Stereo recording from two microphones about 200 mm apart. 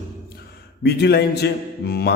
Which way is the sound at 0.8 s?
55° left (ahead or behind).